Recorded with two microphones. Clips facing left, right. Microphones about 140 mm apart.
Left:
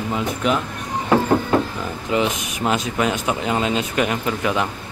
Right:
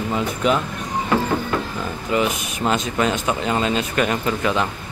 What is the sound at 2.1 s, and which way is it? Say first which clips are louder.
Speech: even; 20° left (ahead or behind).